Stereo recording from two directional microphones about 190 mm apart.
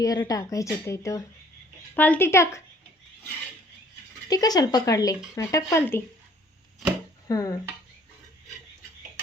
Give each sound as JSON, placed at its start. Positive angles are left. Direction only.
{"t": 0.0, "sound": "speech", "side_deg": 20}
{"t": 4.3, "sound": "speech", "side_deg": 20}
{"t": 7.3, "sound": "speech", "side_deg": 20}